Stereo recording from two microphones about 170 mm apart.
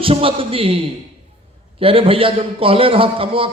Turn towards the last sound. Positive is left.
turn(degrees=-30)  # may be behind; listen again after turning